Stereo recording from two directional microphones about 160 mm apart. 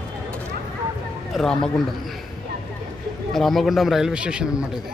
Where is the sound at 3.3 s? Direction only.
Centre (ahead or behind).